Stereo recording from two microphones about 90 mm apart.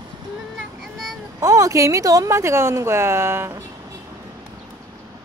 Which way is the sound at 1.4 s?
35° right (ahead or behind).